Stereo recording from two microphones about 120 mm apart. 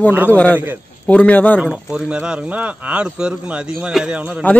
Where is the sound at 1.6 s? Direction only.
5° right (ahead or behind).